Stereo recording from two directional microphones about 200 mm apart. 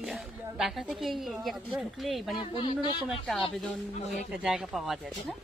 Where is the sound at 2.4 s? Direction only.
25° left (ahead or behind).